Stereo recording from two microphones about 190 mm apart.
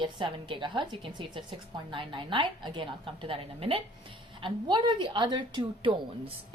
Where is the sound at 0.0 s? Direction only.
25° right (ahead or behind).